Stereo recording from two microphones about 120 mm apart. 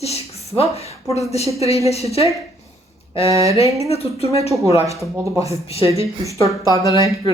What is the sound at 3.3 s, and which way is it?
Speech, 25° right (ahead or behind).